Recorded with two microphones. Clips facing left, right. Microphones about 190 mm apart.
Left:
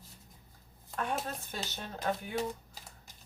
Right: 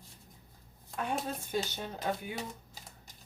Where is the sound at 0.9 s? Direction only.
15° right (ahead or behind).